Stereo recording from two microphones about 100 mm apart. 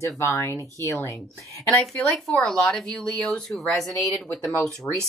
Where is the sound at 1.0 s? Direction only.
30° left (ahead or behind).